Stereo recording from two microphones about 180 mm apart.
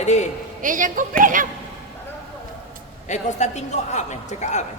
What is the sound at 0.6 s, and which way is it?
Speech, 45° right (ahead or behind).